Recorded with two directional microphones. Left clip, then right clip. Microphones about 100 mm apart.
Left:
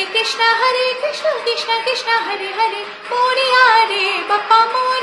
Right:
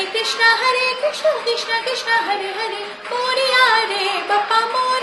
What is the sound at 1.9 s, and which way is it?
Music, 20° left (ahead or behind).